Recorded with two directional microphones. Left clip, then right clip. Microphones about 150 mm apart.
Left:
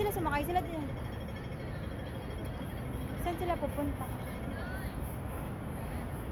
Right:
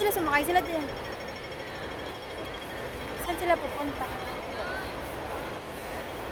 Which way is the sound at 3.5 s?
15° right (ahead or behind).